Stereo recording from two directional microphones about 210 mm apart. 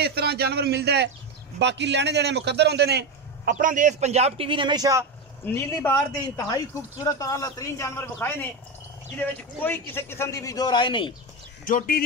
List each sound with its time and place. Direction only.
0.0 s a sound: 50° right (ahead or behind)
1.6 s a man's voice: 55° right (ahead or behind); by 5.0 s 15° right (ahead or behind)
5.4 s speech: 10° left (ahead or behind)
11.6 s speech: 40° left (ahead or behind)